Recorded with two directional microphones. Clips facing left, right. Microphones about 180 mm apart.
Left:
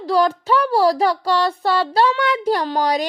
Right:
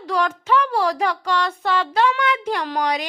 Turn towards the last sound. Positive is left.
turn(degrees=35)  # may be behind; listen again after turning